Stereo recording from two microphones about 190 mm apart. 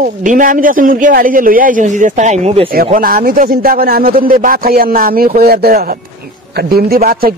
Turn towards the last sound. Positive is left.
turn(degrees=-50)  # may be behind; listen again after turning